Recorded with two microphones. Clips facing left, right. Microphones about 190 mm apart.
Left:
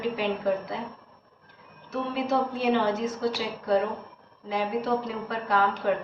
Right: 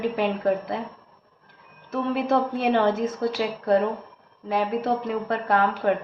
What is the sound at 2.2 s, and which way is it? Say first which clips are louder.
A woman's voice: right 1 dB; 55° right (ahead or behind).